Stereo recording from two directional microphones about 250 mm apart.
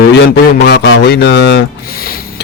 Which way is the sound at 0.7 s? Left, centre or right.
Left.